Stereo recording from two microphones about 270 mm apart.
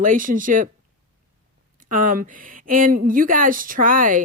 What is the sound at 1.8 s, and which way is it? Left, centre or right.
Speech, right.